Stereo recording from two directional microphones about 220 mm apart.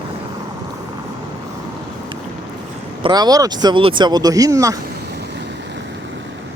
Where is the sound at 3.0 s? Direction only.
20° right (ahead or behind).